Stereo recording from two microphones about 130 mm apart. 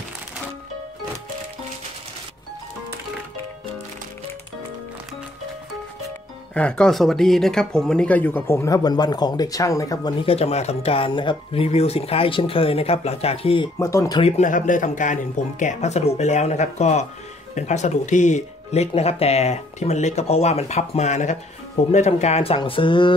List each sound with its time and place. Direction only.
6.5 s speech: 10° left (ahead or behind); by 10.1 s 25° left (ahead or behind)
10.2 s speech: 50° left (ahead or behind)
13.7 s speech: 25° left (ahead or behind)
14.2 s speech: 65° left (ahead or behind)
22.6 s a sound: 40° left (ahead or behind)